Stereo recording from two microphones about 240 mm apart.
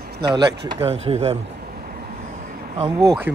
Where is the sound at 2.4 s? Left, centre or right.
Right.